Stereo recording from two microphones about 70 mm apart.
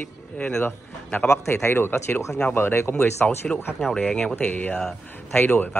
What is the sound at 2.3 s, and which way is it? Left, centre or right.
Speech, centre.